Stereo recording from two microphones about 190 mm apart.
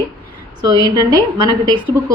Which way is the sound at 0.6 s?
20° right (ahead or behind).